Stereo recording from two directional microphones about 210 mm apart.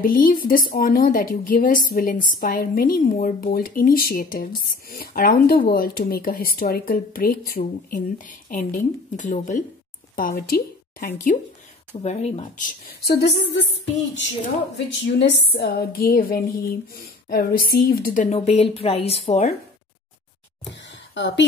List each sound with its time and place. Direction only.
0.0 s a woman's voice: 40° left (ahead or behind)
12.0 s a woman's voice: 30° left (ahead or behind); by 13.7 s 55° left (ahead or behind)
15.0 s a woman's voice: 60° left (ahead or behind); by 19.5 s 30° left (ahead or behind)
20.7 s a sound: 60° left (ahead or behind)